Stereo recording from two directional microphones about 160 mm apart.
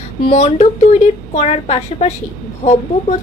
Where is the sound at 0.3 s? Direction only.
40° left (ahead or behind).